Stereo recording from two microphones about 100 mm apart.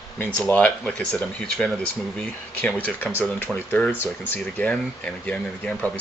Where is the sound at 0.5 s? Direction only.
15° left (ahead or behind).